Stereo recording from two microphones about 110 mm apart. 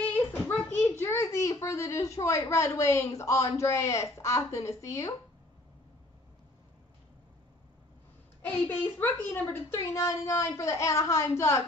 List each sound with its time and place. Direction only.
0.7 s a sound: 20° left (ahead or behind)
2.5 s speech: 25° left (ahead or behind)
8.4 s a child's voice: 15° left (ahead or behind)